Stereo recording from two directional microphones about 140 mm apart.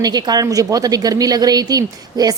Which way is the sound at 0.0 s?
30° right (ahead or behind).